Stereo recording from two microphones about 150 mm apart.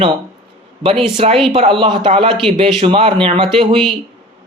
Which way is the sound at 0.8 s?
35° right (ahead or behind).